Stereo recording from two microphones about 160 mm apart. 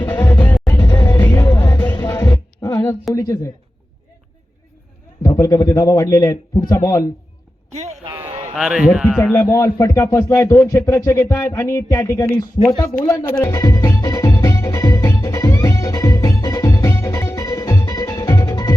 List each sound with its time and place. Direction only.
0.1 s music: 10° left (ahead or behind)
2.6 s a sound: 20° left (ahead or behind)
5.2 s a man's voice: 20° left (ahead or behind)
8.3 s a sound: 40° right (ahead or behind)
8.5 s speech: 5° right (ahead or behind)
9.3 s a man's voice: 15° left (ahead or behind)
13.4 s music: 25° left (ahead or behind)